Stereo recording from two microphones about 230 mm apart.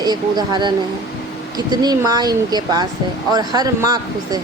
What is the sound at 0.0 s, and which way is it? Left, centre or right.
Speech, centre.